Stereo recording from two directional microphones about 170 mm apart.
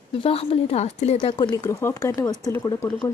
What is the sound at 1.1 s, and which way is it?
Speech, 25° left (ahead or behind).